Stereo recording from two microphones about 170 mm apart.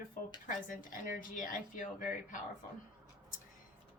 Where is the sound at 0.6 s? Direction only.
55° left (ahead or behind).